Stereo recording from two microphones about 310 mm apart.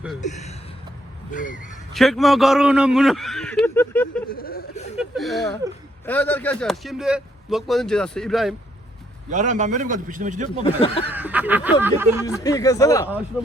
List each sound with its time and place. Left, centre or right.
0.2 s speech: left
1.9 s speech: centre
4.3 s speech: left
4.9 s speech: centre
9.3 s a man's voice: right
10.6 s speech: centre
11.1 s speech: centre
12.4 s speech: centre